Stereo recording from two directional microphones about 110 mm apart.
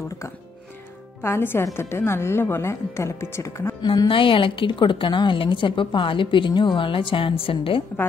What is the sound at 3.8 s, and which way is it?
A woman's voice, 45° left (ahead or behind).